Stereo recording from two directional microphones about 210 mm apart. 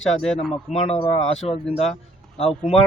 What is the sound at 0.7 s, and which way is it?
Speech, 30° left (ahead or behind).